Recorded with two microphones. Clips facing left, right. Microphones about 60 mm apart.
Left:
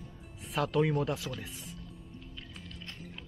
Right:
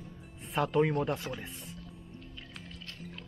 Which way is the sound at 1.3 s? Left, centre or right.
Right.